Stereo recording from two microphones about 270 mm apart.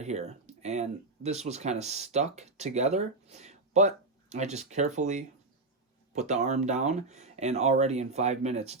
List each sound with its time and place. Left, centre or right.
0.0 s speech: right